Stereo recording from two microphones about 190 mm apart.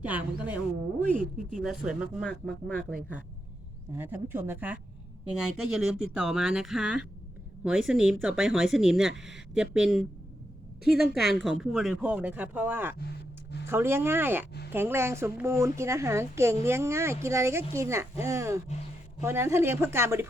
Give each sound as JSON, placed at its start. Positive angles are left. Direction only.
{"t": 0.0, "sound": "a woman's voice", "side_deg": -10}
{"t": 1.2, "sound": "speech", "side_deg": -45}
{"t": 1.6, "sound": "speech", "side_deg": -5}
{"t": 3.9, "sound": "a woman's voice", "side_deg": -10}